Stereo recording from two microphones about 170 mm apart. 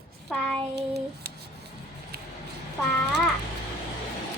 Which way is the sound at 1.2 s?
70° right (ahead or behind).